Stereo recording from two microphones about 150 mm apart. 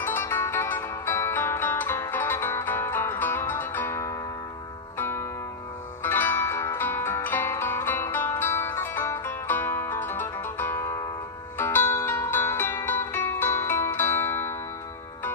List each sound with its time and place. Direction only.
0.0 s music: 15° left (ahead or behind)
6.0 s zither: 15° left (ahead or behind)